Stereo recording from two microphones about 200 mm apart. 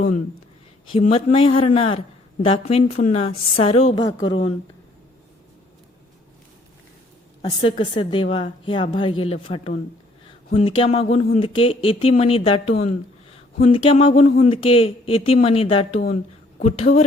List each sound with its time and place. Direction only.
0.9 s speech: 30° left (ahead or behind)
3.9 s speech: 20° left (ahead or behind)
7.4 s speech: 25° left (ahead or behind)